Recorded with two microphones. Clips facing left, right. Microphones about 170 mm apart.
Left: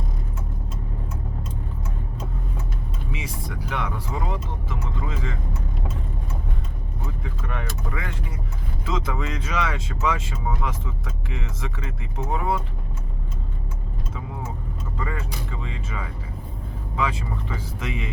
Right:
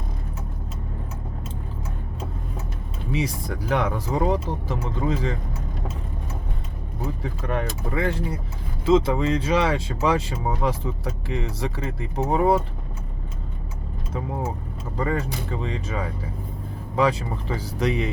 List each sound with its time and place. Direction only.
3.1 s speech: 40° right (ahead or behind)
7.2 s speech: 40° right (ahead or behind)
14.9 s speech: 40° right (ahead or behind)